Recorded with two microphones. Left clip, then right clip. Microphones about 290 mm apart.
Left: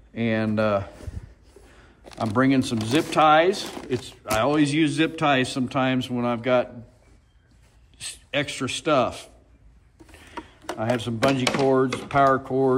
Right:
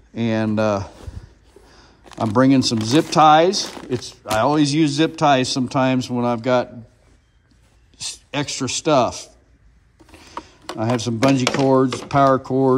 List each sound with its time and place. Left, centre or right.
0.1 s speech: centre
2.0 s speech: centre
8.0 s speech: centre
10.8 s speech: centre